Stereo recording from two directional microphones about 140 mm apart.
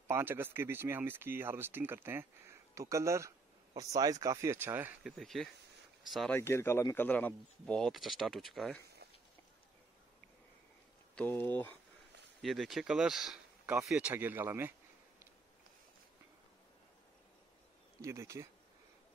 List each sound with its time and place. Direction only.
0.1 s speech: 15° right (ahead or behind)
5.0 s speech: centre (ahead or behind)
6.3 s speech: 15° left (ahead or behind); by 8.7 s centre (ahead or behind)
11.1 s speech: 15° left (ahead or behind)
12.4 s speech: centre (ahead or behind); by 14.7 s 15° right (ahead or behind)
18.0 s speech: 20° right (ahead or behind)